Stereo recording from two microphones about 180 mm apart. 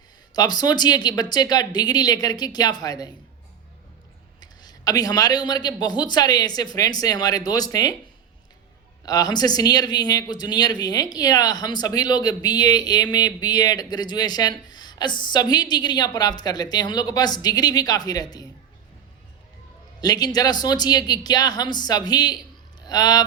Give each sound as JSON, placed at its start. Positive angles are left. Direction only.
{"t": 0.3, "sound": "speech", "side_deg": 20}
{"t": 4.4, "sound": "speech", "side_deg": 20}
{"t": 9.0, "sound": "speech", "side_deg": 20}
{"t": 20.0, "sound": "speech", "side_deg": 20}